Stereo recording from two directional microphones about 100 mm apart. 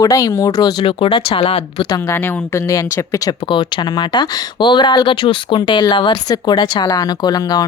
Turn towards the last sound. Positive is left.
turn(degrees=40)  # may be behind; listen again after turning